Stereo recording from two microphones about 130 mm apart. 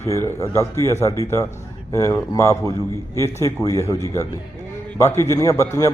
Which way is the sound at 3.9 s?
25° left (ahead or behind).